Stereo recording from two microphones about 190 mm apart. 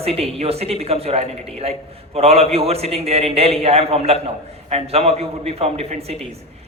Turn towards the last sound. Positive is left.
turn(degrees=-35)  # may be behind; listen again after turning